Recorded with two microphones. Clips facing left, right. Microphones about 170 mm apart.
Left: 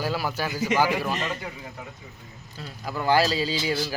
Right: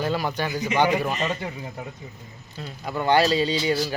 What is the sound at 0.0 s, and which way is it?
Speech, 5° left (ahead or behind).